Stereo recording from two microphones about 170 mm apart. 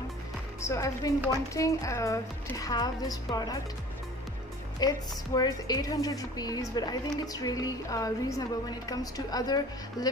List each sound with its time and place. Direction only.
0.6 s a woman's voice: 20° left (ahead or behind)
4.7 s a woman's voice: 25° left (ahead or behind)